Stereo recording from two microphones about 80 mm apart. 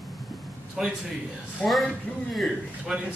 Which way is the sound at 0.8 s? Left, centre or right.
Centre.